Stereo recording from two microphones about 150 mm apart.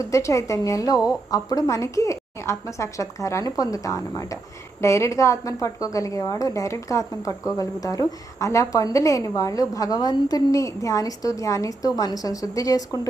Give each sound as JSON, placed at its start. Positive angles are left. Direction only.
{"t": 0.0, "sound": "a woman's voice", "side_deg": 20}